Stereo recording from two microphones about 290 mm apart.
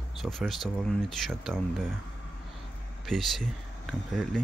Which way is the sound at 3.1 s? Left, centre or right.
Centre.